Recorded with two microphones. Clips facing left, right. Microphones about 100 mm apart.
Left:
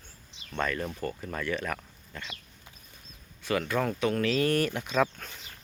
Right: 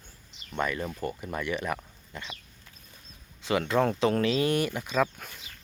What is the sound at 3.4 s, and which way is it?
Speech, 25° right (ahead or behind).